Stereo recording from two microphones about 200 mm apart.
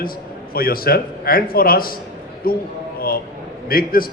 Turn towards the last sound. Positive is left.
turn(degrees=50)  # may be behind; listen again after turning